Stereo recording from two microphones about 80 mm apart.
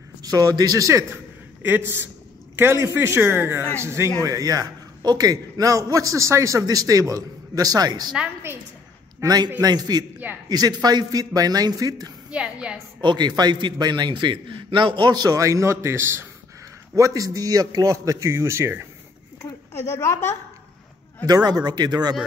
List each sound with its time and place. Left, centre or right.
0.2 s a man's voice: right
1.1 s a sound: right
2.5 s a man's voice: right
4.2 s a man's voice: right
6.6 s a man's voice: right
9.2 s a man's voice: right
12.3 s a sound: centre
13.0 s a man's voice: right
15.3 s a man's voice: right
16.9 s a man's voice: right
19.7 s speech: left
21.5 s a man's voice: right